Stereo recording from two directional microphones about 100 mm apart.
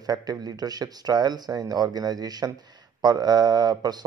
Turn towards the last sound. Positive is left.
turn(degrees=-45)  # may be behind; listen again after turning